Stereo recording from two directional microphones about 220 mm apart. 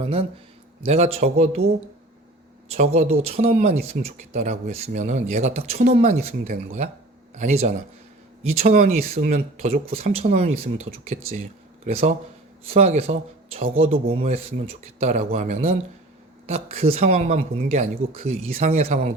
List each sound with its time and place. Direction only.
0.0 s speech: 25° right (ahead or behind)
2.7 s speech: 30° right (ahead or behind)
9.0 s speech: 30° right (ahead or behind)